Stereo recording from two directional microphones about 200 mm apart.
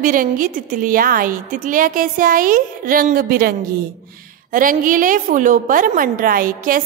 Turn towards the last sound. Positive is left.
turn(degrees=-45)  # may be behind; listen again after turning